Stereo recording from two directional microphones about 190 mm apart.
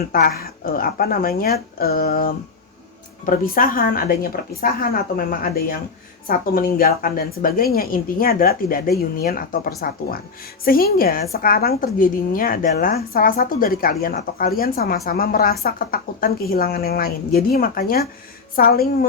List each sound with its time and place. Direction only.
0.1 s a woman's voice: 50° left (ahead or behind)